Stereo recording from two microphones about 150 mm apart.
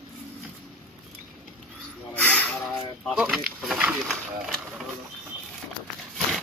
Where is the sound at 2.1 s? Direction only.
10° left (ahead or behind).